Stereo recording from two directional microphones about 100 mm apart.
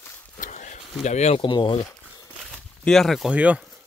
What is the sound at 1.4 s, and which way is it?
Speech, 55° left (ahead or behind).